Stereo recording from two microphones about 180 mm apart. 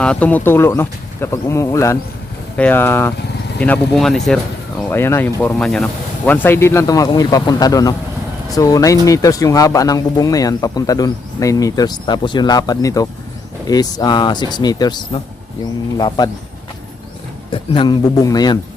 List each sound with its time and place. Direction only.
0.0 s speech: 5° left (ahead or behind)
4.8 s speech: 15° left (ahead or behind)
17.5 s speech: 30° left (ahead or behind)